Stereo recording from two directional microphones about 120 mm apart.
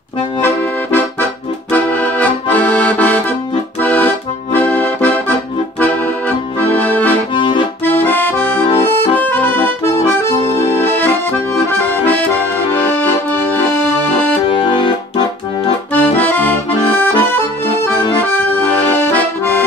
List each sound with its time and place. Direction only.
1.7 s accordion: 15° left (ahead or behind)
6.7 s accordion: 15° left (ahead or behind)
7.3 s accordion: 45° left (ahead or behind)
7.8 s accordion: 15° left (ahead or behind)
10.8 s accordion: 15° left (ahead or behind)
14.5 s music: 40° left (ahead or behind)
15.9 s accordion: 15° left (ahead or behind)
18.3 s accordion: 15° left (ahead or behind)